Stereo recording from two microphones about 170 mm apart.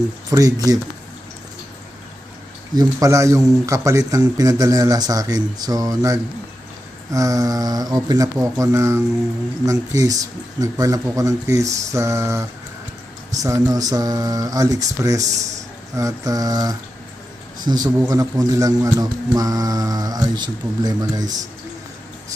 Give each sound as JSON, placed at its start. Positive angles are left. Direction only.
{"t": 0.3, "sound": "a man's voice", "side_deg": -20}
{"t": 2.7, "sound": "a man's voice", "side_deg": -20}